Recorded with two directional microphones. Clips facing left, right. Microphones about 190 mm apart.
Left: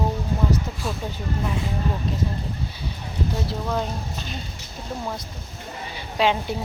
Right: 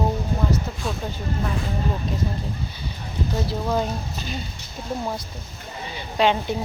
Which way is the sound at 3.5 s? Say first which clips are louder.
Right 2 dB; 5° right (ahead or behind).